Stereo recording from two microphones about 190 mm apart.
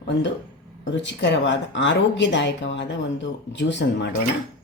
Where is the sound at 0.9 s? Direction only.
70° left (ahead or behind).